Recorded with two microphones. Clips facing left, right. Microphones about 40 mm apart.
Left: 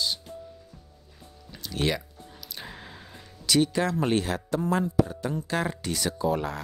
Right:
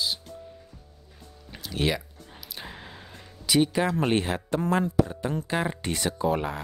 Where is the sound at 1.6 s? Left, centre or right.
Centre.